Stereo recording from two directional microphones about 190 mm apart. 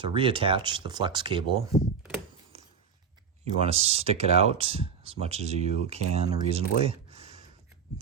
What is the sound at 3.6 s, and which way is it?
Speech, 30° right (ahead or behind).